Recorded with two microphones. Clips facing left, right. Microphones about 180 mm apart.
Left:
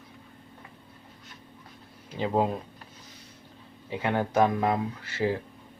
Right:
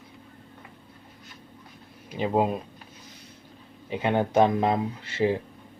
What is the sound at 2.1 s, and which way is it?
Speech, 15° right (ahead or behind).